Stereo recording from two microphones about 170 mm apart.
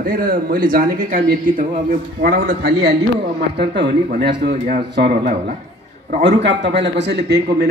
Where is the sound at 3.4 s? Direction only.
75° right (ahead or behind).